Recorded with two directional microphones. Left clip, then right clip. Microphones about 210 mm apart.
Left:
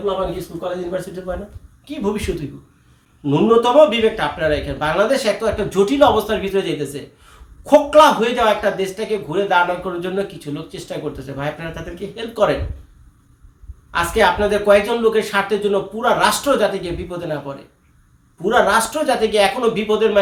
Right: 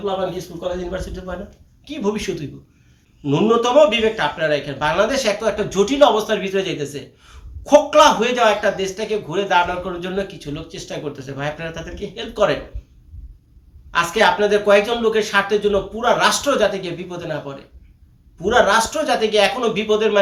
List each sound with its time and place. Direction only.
0.9 s a man's voice: 5° left (ahead or behind)
13.9 s a man's voice: 5° left (ahead or behind)
18.4 s speech: 5° left (ahead or behind)